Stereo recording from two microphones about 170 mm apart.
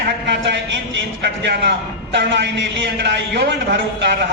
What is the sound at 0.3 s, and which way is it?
A woman's voice, 90° right.